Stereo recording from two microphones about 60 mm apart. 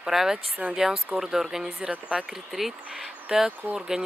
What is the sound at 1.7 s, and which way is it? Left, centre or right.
Speech, centre.